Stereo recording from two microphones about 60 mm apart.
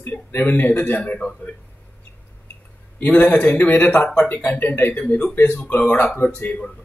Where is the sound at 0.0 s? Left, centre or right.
Left.